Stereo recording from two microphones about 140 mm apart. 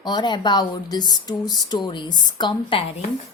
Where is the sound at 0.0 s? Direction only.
30° left (ahead or behind).